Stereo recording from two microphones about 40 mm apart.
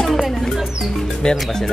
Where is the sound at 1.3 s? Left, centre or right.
Centre.